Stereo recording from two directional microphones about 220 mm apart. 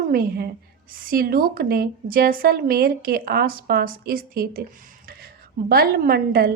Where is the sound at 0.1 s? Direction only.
45° right (ahead or behind).